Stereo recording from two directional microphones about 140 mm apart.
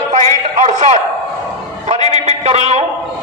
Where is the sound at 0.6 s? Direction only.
55° right (ahead or behind).